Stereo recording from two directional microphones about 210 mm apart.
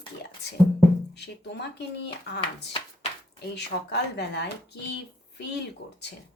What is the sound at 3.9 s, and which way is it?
Speech, 55° left (ahead or behind).